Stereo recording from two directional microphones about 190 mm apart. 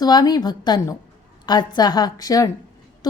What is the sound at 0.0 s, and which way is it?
A woman's voice, 20° left (ahead or behind).